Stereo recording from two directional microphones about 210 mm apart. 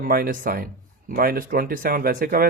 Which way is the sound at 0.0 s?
40° right (ahead or behind).